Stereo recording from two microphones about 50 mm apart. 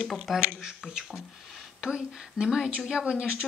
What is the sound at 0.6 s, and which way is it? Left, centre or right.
Speech, centre.